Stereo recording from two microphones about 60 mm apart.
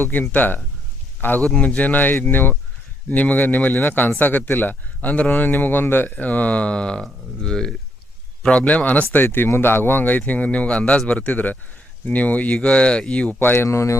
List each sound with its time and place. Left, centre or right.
0.1 s speech: left
1.4 s speech: centre
8.4 s speech: left
9.5 s speech: left; by 13.3 s centre
13.4 s speech: left
13.7 s speech: left